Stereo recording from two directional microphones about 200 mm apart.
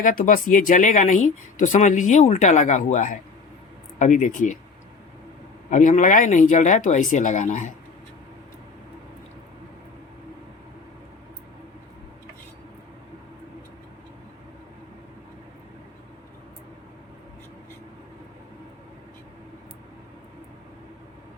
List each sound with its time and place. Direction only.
0.0 s speech: 45° left (ahead or behind)
5.7 s speech: 40° left (ahead or behind)